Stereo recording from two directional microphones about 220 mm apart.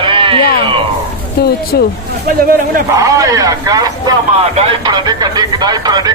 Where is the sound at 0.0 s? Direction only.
25° right (ahead or behind).